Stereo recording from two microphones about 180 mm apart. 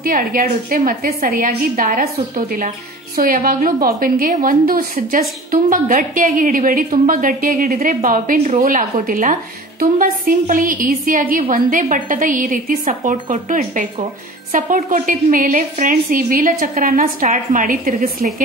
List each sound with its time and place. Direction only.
0.0 s a woman's voice: 50° right (ahead or behind)